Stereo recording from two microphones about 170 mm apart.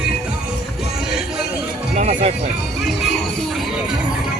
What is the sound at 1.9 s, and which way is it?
Music, 40° right (ahead or behind).